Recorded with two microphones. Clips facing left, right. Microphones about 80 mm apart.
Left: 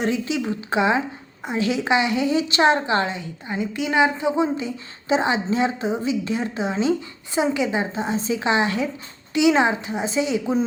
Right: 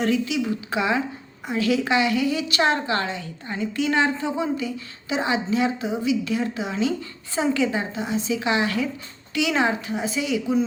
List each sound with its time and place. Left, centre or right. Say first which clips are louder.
0.0 s a woman's voice: right 1 dB; left